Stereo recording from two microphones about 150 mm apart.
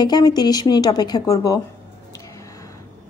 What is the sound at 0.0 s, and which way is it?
Speech, 25° left (ahead or behind).